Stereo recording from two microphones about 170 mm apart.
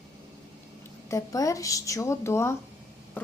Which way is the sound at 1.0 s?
20° left (ahead or behind).